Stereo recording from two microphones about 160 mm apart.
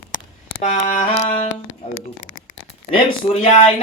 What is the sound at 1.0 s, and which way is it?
Music, 45° left (ahead or behind).